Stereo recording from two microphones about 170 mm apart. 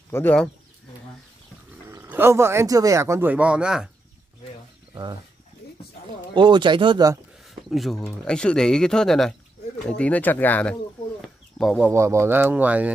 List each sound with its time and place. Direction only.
0.1 s speech: 10° left (ahead or behind)
1.9 s speech: 15° right (ahead or behind)
6.3 s speech: 25° right (ahead or behind)
7.4 s a sound: centre (ahead or behind)
8.0 s speech: 5° left (ahead or behind)
9.8 s bird: 5° left (ahead or behind)
11.8 s speech: 15° right (ahead or behind)